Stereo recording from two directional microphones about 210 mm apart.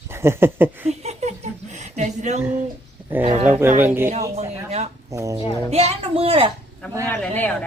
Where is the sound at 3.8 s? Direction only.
10° right (ahead or behind).